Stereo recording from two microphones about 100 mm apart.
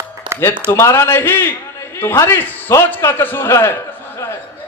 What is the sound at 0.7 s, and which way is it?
A man's voice, 30° left (ahead or behind).